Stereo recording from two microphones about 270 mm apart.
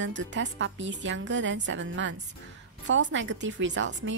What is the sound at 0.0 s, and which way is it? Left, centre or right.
Speech, right.